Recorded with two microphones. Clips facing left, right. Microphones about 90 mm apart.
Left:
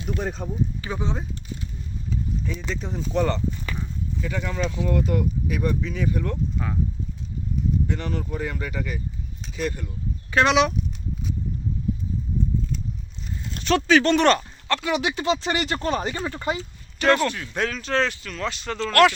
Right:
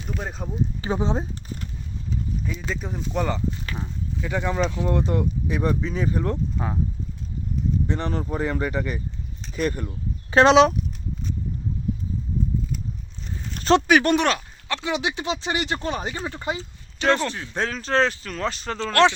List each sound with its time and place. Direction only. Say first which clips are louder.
0.2 s speech: left 3 dB; 5° right (ahead or behind)
0.8 s speech: right 5 dB; 30° right (ahead or behind)
2.5 s speech: even; 5° right (ahead or behind)
3.8 s speech: even; 20° right (ahead or behind)
7.9 s speech: right 2 dB; 35° right (ahead or behind)
10.3 s speech: right 5 dB; 30° right (ahead or behind)
10.8 s a sound: even; 5° left (ahead or behind)
13.7 s speech: even; 15° right (ahead or behind); by 18.8 s 35° right (ahead or behind)
18.8 s speech: left 1 dB; 25° right (ahead or behind)